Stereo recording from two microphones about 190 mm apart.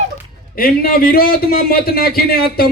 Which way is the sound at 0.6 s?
50° left (ahead or behind).